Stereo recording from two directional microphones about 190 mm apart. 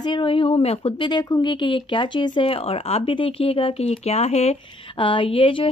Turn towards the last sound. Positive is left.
turn(degrees=30)  # may be behind; listen again after turning